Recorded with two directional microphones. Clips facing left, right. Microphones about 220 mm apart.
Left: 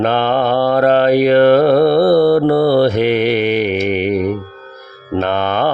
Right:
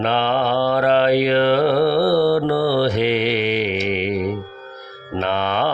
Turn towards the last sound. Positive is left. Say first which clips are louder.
# left 5 dB
turn(degrees=50)  # may be behind; listen again after turning